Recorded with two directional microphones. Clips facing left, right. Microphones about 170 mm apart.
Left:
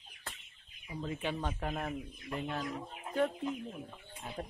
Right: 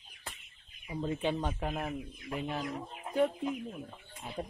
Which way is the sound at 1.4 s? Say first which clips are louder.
Right 2 dB; 10° right (ahead or behind).